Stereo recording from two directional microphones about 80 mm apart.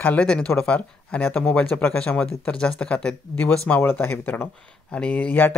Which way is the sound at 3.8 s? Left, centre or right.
Left.